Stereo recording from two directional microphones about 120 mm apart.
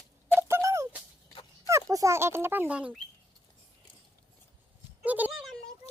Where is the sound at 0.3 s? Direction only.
20° right (ahead or behind).